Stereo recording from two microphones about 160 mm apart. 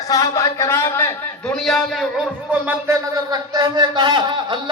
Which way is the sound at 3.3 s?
25° right (ahead or behind).